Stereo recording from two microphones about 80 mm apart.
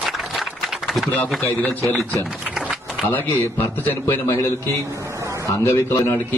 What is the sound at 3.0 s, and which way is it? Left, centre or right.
A man's voice, left.